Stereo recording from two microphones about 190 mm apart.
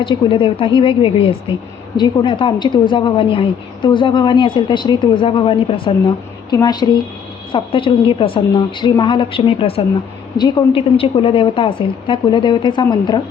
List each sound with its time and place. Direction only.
0.0 s a woman's voice: 25° left (ahead or behind)